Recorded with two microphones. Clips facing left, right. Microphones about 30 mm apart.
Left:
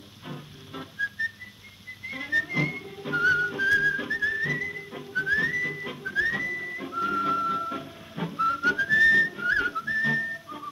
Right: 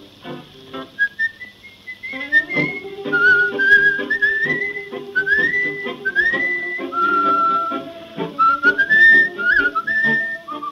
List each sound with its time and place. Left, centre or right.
0.3 s music: right
2.0 s whistling: right